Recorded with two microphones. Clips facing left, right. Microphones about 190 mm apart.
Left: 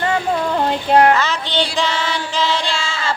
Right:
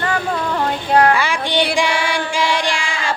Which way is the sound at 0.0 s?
25° left (ahead or behind).